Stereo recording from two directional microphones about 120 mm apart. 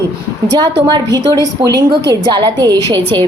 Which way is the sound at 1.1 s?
30° right (ahead or behind).